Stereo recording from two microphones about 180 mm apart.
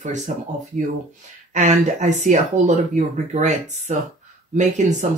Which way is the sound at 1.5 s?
40° right (ahead or behind).